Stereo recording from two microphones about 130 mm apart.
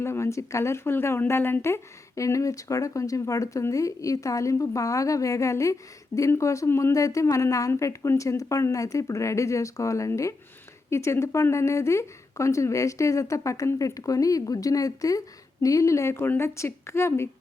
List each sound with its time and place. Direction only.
0.0 s speech: 20° left (ahead or behind)